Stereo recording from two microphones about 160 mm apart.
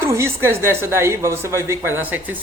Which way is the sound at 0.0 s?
15° right (ahead or behind).